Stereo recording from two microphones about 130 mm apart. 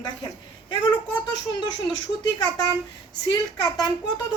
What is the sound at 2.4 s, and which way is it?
A woman's voice, 30° left (ahead or behind).